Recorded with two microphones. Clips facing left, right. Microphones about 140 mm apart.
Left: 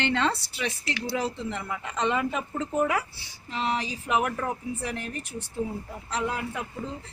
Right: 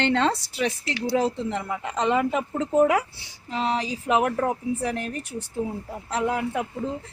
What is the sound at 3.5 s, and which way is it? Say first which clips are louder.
A woman's voice: right 3 dB; 40° right (ahead or behind).